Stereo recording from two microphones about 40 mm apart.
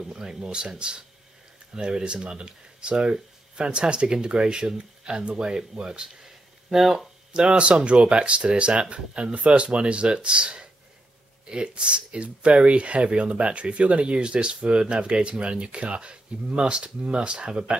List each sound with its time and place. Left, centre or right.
0.0 s speech: centre
7.3 s speech: right